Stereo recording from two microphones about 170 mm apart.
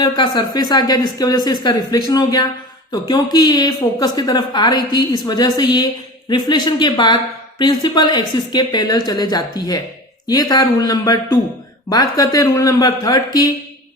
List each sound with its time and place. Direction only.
0.0 s a woman's voice: 25° left (ahead or behind)